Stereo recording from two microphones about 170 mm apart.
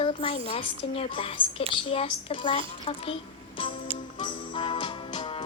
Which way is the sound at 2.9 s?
40° left (ahead or behind).